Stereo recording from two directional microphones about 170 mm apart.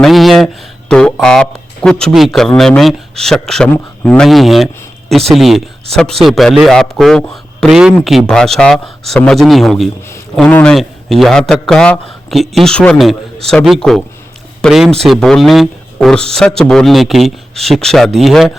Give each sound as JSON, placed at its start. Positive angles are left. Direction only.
{"t": 0.0, "sound": "speech", "side_deg": 0}